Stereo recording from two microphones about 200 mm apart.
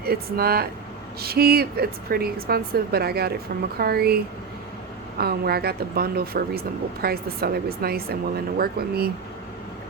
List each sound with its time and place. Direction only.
0.0 s speech: 50° right (ahead or behind)